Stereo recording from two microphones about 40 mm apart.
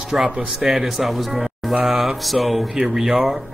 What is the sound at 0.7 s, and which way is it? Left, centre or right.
Speech, centre.